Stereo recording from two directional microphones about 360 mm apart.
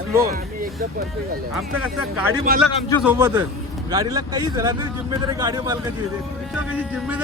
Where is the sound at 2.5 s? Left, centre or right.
Right.